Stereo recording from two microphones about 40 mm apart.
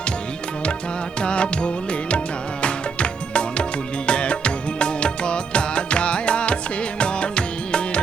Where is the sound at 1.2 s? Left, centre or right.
Left.